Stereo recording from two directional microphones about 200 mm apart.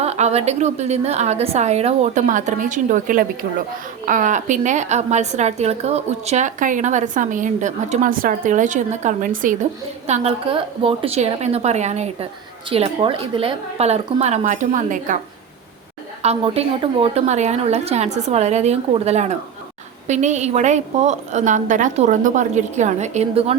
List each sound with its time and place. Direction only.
0.0 s a woman's voice: 30° right (ahead or behind)
10.1 s a woman's voice: 30° right (ahead or behind)
16.2 s a woman's voice: 30° right (ahead or behind)